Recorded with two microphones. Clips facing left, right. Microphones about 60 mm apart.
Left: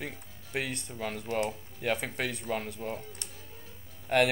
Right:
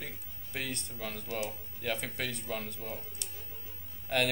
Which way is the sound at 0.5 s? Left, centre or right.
Centre.